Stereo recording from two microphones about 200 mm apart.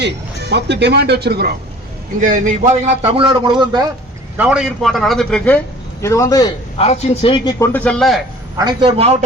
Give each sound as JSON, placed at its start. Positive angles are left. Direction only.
{"t": 0.5, "sound": "speech", "side_deg": -55}
{"t": 2.2, "sound": "a man's voice", "side_deg": -40}
{"t": 4.4, "sound": "a man's voice", "side_deg": -5}
{"t": 6.0, "sound": "a man's voice", "side_deg": 15}
{"t": 6.7, "sound": "a man's voice", "side_deg": 30}
{"t": 7.7, "sound": "a man's voice", "side_deg": 5}
{"t": 8.5, "sound": "a man's voice", "side_deg": -20}